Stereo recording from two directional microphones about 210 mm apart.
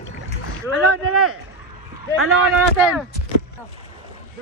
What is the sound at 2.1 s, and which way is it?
Speech, 80° right.